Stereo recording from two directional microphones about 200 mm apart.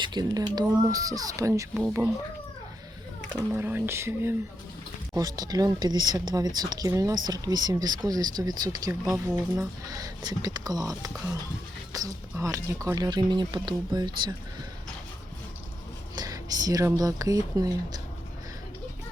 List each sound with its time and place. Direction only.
0.0 s speech: 20° right (ahead or behind)
3.5 s speech: 10° right (ahead or behind)
16.1 s speech: 20° right (ahead or behind)